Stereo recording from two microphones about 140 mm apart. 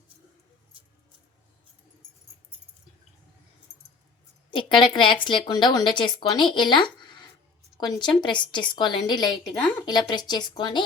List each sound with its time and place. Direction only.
4.5 s a woman's voice: 35° left (ahead or behind)